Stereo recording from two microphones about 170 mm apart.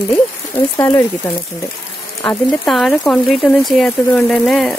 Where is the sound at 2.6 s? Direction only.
Centre (ahead or behind).